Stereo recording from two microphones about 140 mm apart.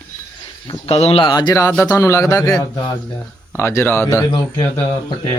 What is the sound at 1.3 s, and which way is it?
Speech, 25° left (ahead or behind).